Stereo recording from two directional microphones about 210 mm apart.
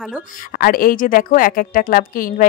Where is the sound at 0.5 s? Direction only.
40° left (ahead or behind).